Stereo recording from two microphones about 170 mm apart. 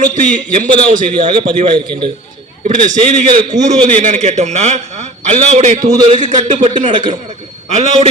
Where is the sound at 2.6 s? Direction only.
45° right (ahead or behind).